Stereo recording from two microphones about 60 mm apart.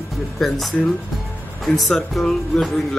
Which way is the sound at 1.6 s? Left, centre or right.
Centre.